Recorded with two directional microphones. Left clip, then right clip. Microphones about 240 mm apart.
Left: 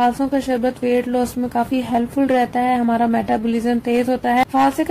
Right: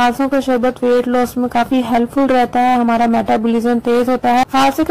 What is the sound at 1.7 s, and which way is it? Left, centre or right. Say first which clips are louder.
Speech: right 5 dB; centre.